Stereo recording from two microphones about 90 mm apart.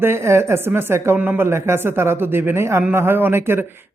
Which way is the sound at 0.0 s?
30° right (ahead or behind).